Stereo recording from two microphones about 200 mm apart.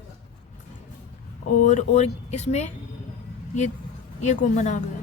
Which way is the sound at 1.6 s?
35° left (ahead or behind).